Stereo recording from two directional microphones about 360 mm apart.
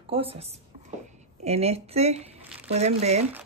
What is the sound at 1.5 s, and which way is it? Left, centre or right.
A woman's voice, centre.